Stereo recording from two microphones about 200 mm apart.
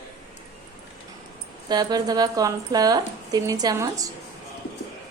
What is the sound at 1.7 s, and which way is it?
Speech, 20° right (ahead or behind).